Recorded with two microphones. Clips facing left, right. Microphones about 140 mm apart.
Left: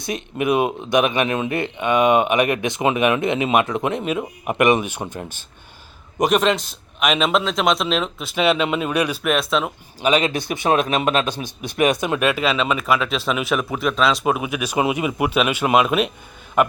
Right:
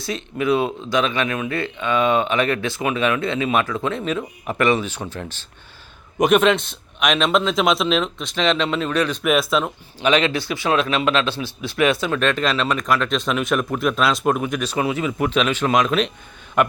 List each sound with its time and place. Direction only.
0.0 s speech: 20° left (ahead or behind)
6.1 s speech: centre (ahead or behind)
9.2 s speech: centre (ahead or behind)
10.0 s speech: 10° left (ahead or behind)